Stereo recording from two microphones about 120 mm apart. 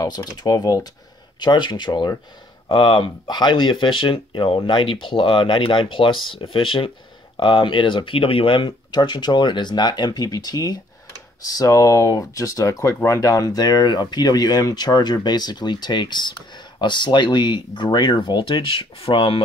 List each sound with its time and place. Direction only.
0.0 s speech: 35° left (ahead or behind); by 19.4 s 50° left (ahead or behind)